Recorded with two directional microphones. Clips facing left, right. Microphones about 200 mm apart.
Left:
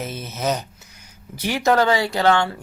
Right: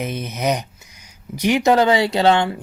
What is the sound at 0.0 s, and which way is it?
Speech, 15° right (ahead or behind).